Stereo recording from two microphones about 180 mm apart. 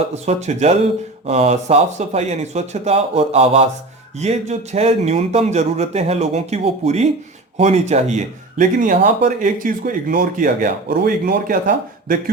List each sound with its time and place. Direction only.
0.3 s a man's voice: 40° right (ahead or behind)